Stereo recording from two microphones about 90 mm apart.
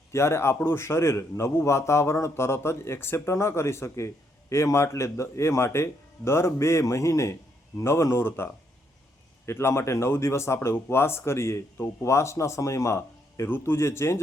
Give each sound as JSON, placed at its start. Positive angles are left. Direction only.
{"t": 0.1, "sound": "a man's voice", "side_deg": 30}
{"t": 9.5, "sound": "a man's voice", "side_deg": 30}